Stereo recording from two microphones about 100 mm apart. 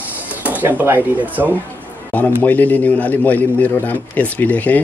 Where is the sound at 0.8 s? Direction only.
20° right (ahead or behind).